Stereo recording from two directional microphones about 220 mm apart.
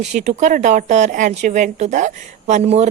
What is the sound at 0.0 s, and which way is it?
A woman's voice, 35° right (ahead or behind).